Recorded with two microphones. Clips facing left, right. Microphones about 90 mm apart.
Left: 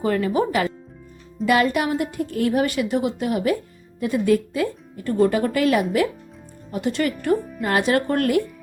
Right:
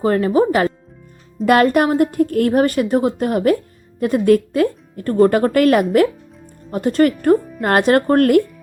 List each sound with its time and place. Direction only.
0.0 s speech: 40° right (ahead or behind)
1.5 s a woman's voice: 50° right (ahead or behind)
6.7 s a woman's voice: 45° right (ahead or behind)